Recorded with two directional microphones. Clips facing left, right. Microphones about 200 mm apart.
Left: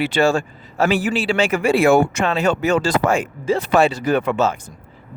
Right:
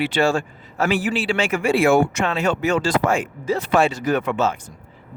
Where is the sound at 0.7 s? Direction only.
35° left (ahead or behind).